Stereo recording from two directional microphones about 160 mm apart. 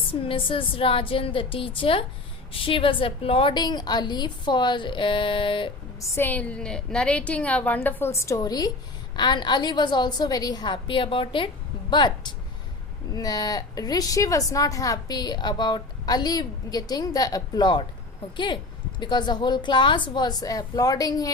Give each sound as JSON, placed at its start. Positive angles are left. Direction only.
{"t": 0.1, "sound": "a woman's voice", "side_deg": 35}
{"t": 6.0, "sound": "a woman's voice", "side_deg": 15}